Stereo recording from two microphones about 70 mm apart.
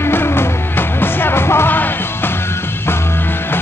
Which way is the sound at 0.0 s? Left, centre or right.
Left.